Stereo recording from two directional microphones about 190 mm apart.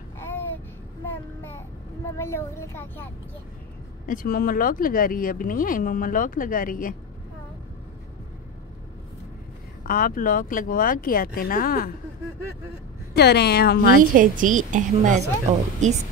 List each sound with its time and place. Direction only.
2.0 s speech: 15° left (ahead or behind)
4.0 s speech: 45° left (ahead or behind)
9.8 s speech: 50° left (ahead or behind)
13.1 s speech: 60° left (ahead or behind)
14.1 s a woman's voice: 45° right (ahead or behind)